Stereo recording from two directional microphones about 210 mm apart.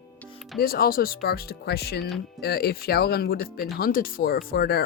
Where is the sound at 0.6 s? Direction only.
45° left (ahead or behind).